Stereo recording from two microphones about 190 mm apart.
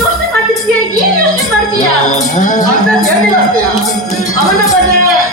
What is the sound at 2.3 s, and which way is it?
Speech, 40° left (ahead or behind).